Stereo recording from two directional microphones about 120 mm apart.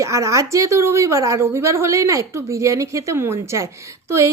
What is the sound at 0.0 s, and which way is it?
Speech, 25° right (ahead or behind).